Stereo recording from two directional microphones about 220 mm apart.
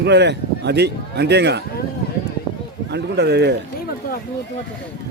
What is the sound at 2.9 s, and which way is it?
Speech, 50° right (ahead or behind).